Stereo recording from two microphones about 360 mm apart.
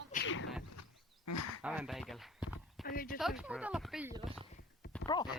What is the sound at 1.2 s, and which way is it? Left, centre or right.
Speech, left.